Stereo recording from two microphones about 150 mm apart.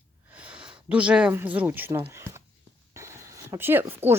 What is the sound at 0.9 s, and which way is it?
A woman's voice, 10° right (ahead or behind).